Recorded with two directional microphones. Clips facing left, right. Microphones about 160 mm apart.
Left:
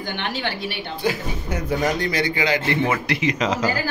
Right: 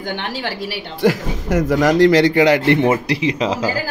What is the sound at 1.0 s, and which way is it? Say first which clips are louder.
A man's voice: right 8 dB; 90° right.